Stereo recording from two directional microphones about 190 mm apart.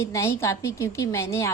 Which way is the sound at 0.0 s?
15° left (ahead or behind).